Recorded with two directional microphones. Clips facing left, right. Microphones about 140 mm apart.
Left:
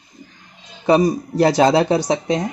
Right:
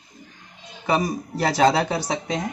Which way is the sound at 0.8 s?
20° left (ahead or behind).